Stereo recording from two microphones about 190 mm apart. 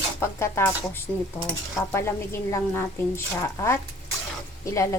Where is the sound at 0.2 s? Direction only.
15° left (ahead or behind).